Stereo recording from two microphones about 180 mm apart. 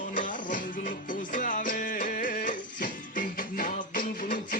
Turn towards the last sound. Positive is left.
turn(degrees=50)  # may be behind; listen again after turning